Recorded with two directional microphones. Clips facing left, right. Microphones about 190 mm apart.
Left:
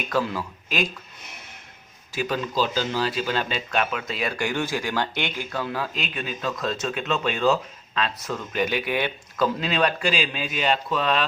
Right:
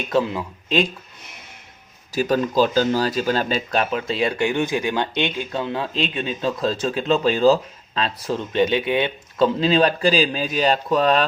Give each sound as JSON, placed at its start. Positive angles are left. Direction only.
{"t": 0.0, "sound": "speech", "side_deg": -25}
{"t": 2.1, "sound": "speech", "side_deg": -45}